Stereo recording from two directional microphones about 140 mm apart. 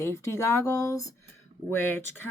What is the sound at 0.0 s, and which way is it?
Speech, 20° left (ahead or behind).